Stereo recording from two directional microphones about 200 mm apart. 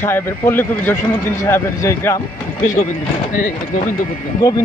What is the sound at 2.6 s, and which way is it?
Speech, 40° left (ahead or behind).